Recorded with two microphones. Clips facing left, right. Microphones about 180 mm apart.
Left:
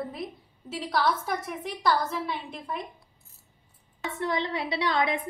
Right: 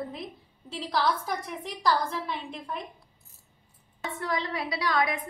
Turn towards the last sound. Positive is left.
turn(degrees=25)  # may be behind; listen again after turning